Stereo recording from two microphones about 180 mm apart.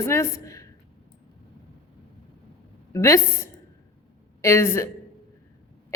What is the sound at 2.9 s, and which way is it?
Speech, 15° left (ahead or behind).